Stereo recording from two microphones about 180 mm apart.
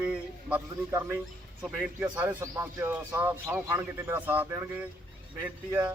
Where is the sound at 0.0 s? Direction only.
5° right (ahead or behind).